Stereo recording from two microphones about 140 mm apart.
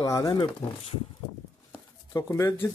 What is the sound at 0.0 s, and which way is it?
Speech, 25° left (ahead or behind).